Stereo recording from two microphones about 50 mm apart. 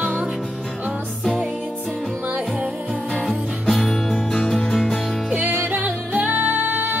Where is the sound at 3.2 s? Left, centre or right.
Centre.